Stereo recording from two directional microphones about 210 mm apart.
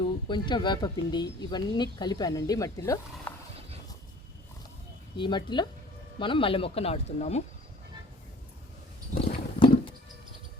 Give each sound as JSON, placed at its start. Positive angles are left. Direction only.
{"t": 0.0, "sound": "speech", "side_deg": 20}
{"t": 5.1, "sound": "speech", "side_deg": 20}
{"t": 9.1, "sound": "horse", "side_deg": 25}